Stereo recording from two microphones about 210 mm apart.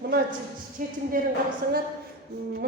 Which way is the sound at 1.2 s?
40° right (ahead or behind).